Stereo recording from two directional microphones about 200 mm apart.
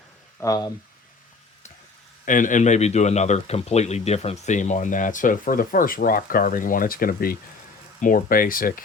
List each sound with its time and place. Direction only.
0.3 s speech: 15° left (ahead or behind)
2.2 s speech: 40° left (ahead or behind)